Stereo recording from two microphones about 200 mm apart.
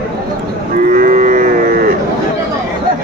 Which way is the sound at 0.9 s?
40° right (ahead or behind).